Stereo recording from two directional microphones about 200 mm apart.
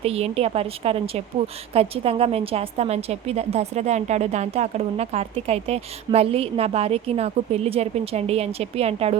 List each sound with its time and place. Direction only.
0.0 s a woman's voice: 30° right (ahead or behind)